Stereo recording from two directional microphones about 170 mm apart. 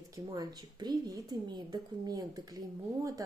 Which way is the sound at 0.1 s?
20° right (ahead or behind).